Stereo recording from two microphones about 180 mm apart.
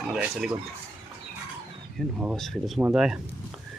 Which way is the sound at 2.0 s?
Centre (ahead or behind).